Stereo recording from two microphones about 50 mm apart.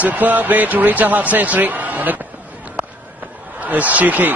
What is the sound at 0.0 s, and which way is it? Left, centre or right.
A man's voice, right.